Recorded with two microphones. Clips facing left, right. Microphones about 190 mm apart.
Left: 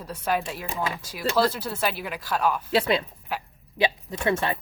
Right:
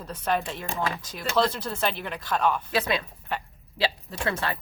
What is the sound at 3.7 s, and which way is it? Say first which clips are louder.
Speech: left 3 dB; 20° left (ahead or behind).